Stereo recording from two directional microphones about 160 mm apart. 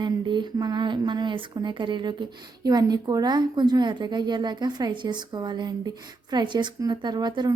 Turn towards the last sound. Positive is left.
turn(degrees=-25)  # may be behind; listen again after turning